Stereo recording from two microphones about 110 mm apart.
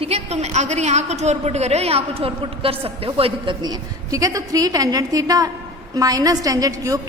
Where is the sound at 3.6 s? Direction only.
35° right (ahead or behind).